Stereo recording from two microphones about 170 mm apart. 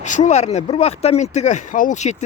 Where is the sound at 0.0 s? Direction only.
45° left (ahead or behind).